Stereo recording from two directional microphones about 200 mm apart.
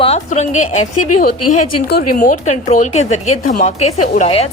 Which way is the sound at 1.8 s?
45° left (ahead or behind).